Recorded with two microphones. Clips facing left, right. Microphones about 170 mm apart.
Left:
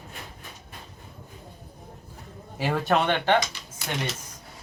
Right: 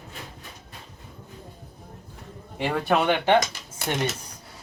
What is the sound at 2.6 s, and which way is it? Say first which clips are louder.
Speech: right 1 dB; centre (ahead or behind).